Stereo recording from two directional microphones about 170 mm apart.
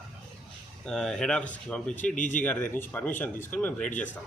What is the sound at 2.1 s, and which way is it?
Speech, 50° left (ahead or behind).